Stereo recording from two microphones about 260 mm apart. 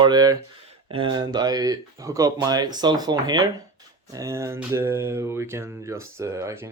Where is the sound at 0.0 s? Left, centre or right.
Centre.